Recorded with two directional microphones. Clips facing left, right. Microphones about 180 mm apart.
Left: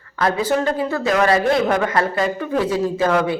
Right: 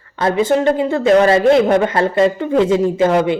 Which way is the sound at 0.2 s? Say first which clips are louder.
Right 4 dB; 25° right (ahead or behind).